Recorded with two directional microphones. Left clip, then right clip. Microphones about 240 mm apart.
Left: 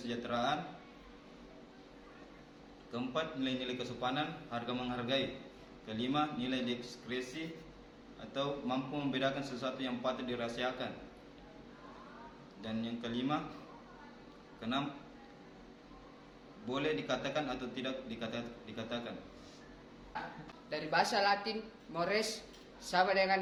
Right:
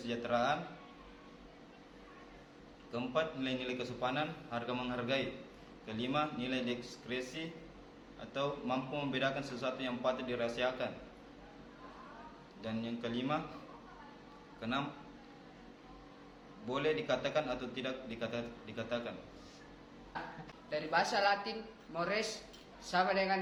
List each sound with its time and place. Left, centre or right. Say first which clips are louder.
0.0 s a man's voice: right 2 dB; centre
2.9 s a man's voice: right 2 dB; centre
12.6 s a man's voice: right 1 dB; centre
14.6 s a man's voice: even; centre
16.6 s a man's voice: right 2 dB; centre
20.7 s a woman's voice: left 1 dB; left